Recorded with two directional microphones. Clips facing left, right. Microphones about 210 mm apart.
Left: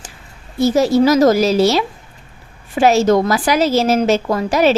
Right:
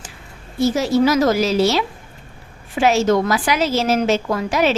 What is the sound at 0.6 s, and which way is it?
A woman's voice, 40° left (ahead or behind).